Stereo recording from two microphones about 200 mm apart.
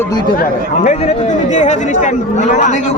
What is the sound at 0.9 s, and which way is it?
Speech, 35° left (ahead or behind).